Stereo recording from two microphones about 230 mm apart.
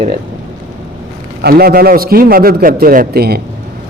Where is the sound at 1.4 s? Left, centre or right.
Right.